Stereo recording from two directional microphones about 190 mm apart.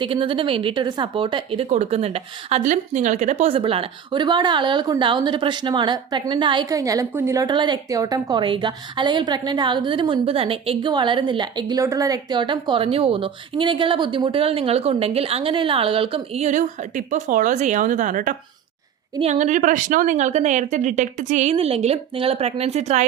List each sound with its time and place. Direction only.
0.0 s a woman's voice: 30° right (ahead or behind)